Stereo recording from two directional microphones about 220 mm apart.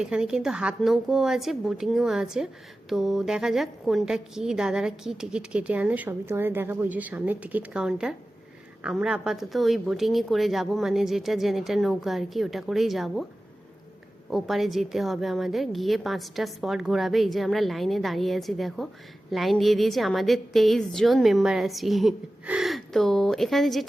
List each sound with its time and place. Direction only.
0.0 s a woman's voice: 5° right (ahead or behind)
14.3 s a woman's voice: centre (ahead or behind)